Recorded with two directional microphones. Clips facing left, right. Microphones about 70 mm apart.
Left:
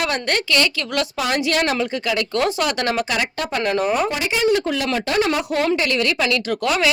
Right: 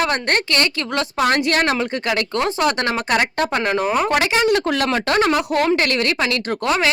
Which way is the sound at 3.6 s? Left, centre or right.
Right.